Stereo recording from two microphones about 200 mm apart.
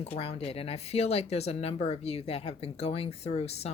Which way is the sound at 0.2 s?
30° left (ahead or behind).